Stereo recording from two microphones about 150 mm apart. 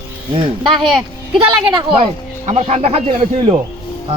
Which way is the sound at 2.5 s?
45° right (ahead or behind).